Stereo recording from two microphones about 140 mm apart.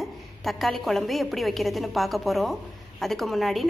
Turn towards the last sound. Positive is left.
turn(degrees=0)  # may be behind; listen again after turning